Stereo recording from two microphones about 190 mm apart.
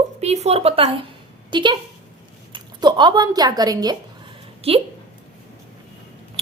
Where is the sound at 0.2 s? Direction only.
35° right (ahead or behind).